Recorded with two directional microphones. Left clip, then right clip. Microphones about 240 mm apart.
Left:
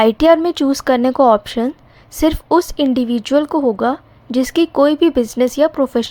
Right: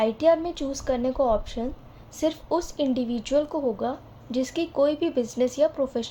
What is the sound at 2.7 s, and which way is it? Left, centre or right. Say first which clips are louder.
A woman's voice: left 10 dB; left.